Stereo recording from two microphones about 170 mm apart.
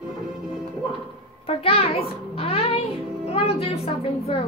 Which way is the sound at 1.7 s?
35° left (ahead or behind).